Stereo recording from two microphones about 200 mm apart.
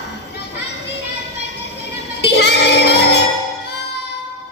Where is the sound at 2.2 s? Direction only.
60° left (ahead or behind).